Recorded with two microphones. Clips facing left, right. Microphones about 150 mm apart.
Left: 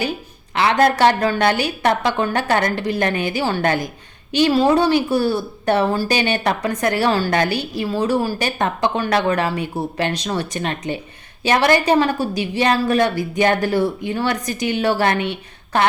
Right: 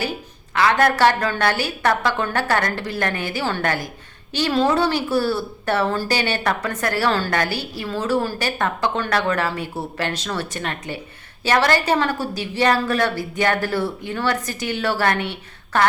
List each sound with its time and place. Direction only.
0.5 s a woman's voice: 25° left (ahead or behind)